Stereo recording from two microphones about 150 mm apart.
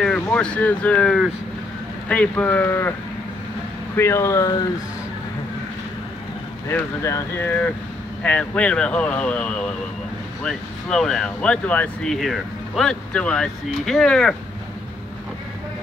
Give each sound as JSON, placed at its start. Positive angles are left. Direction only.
{"t": 0.0, "sound": "speech", "side_deg": 5}
{"t": 3.9, "sound": "speech", "side_deg": 15}
{"t": 6.7, "sound": "speech", "side_deg": 20}